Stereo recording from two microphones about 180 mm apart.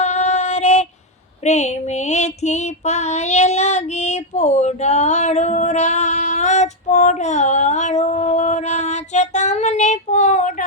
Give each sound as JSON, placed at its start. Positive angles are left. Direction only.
{"t": 0.0, "sound": "female singing", "side_deg": 40}